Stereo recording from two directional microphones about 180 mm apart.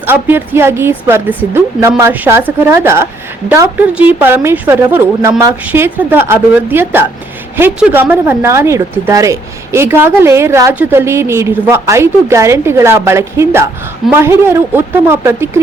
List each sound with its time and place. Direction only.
0.0 s a woman's voice: 10° right (ahead or behind)